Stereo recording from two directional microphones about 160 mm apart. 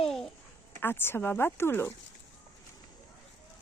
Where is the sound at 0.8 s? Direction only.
15° left (ahead or behind).